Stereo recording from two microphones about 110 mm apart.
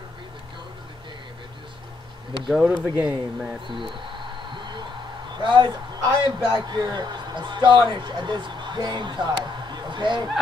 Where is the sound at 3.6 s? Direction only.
50° right (ahead or behind).